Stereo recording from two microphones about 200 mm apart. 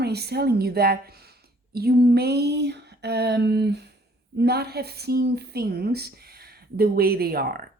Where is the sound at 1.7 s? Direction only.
50° right (ahead or behind).